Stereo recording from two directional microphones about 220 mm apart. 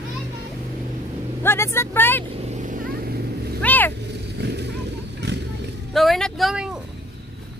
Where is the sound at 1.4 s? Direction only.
10° left (ahead or behind).